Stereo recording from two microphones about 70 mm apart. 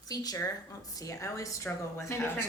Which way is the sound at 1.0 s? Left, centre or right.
Left.